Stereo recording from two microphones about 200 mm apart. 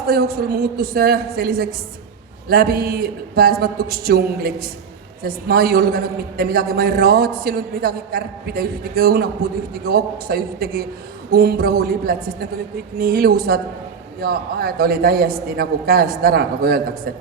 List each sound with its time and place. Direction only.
0.0 s a man's voice: 50° right (ahead or behind)